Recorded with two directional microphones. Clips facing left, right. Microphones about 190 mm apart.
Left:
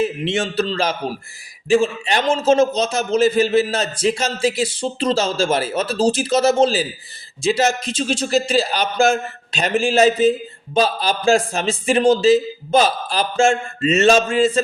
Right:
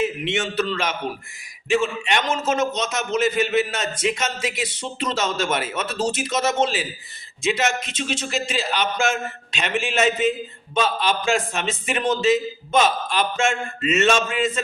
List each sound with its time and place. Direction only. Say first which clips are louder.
0.0 s a man's voice: left 3 dB; 30° left (ahead or behind)